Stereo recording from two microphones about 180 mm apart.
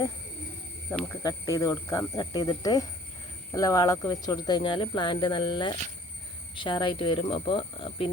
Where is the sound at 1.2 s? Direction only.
20° left (ahead or behind).